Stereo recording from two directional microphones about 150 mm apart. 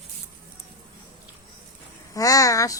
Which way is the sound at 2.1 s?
25° left (ahead or behind).